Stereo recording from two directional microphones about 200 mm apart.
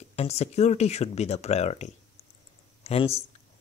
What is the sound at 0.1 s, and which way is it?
Speech, 30° left (ahead or behind).